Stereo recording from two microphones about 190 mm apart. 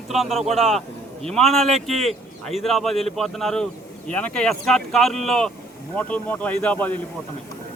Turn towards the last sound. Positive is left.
turn(degrees=10)  # may be behind; listen again after turning